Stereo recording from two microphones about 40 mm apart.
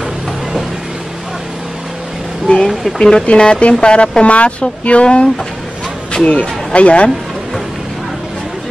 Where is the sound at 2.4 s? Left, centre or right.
Centre.